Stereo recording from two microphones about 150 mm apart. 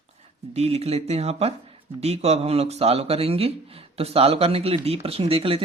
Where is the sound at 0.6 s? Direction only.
45° right (ahead or behind).